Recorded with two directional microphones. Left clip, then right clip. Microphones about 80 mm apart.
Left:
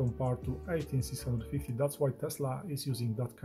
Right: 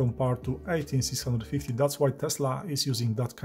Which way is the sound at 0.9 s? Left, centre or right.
Right.